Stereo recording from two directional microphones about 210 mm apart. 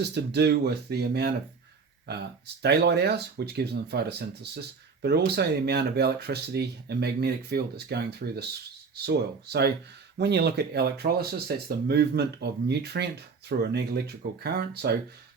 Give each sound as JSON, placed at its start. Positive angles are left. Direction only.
{"t": 0.0, "sound": "speech", "side_deg": -55}